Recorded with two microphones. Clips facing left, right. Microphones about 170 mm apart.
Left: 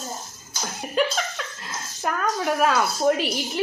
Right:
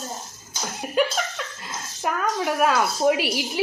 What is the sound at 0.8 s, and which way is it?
A woman's voice, centre (ahead or behind).